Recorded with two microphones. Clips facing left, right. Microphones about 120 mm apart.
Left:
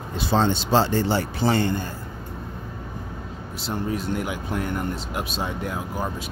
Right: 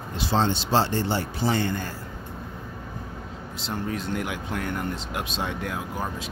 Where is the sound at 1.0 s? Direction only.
90° left.